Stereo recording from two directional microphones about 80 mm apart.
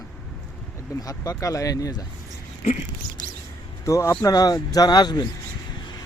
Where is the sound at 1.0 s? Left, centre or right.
Left.